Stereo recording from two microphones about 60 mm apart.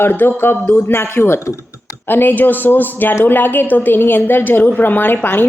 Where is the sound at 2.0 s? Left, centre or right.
Left.